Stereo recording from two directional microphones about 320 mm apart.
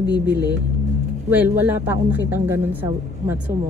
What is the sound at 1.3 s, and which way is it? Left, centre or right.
A woman's voice, centre.